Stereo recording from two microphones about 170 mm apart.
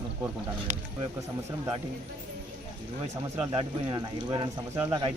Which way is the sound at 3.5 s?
25° right (ahead or behind).